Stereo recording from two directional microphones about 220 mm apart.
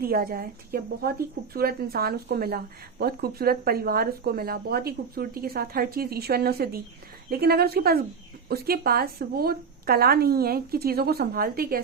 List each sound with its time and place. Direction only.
0.0 s speech: 40° right (ahead or behind)